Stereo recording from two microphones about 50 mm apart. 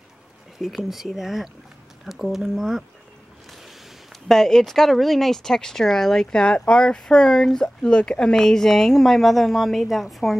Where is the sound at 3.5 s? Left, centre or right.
Centre.